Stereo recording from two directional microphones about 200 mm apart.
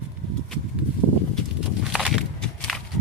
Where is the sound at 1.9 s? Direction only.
Centre (ahead or behind).